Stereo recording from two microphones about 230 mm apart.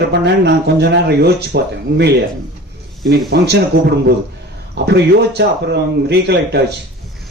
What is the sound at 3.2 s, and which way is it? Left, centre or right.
Speech, right.